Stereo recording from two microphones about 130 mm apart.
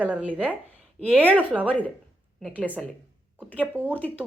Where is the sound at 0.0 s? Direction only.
10° right (ahead or behind).